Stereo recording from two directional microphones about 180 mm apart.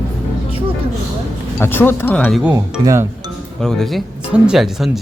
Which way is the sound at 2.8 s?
15° right (ahead or behind).